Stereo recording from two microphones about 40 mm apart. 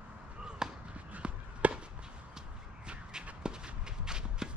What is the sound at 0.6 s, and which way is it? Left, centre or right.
Basketball bounce, centre.